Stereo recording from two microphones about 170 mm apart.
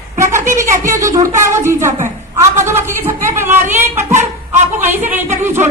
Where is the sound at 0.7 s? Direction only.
50° right (ahead or behind).